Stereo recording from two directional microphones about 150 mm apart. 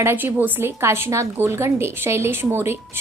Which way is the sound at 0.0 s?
15° right (ahead or behind).